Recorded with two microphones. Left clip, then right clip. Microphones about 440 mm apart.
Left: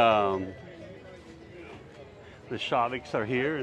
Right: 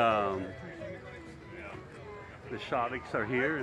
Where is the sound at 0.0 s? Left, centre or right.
Left.